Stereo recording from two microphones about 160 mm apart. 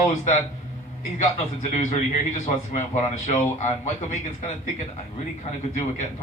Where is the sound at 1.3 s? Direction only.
45° left (ahead or behind).